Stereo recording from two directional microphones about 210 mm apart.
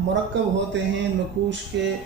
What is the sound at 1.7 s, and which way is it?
Speech, 60° right (ahead or behind).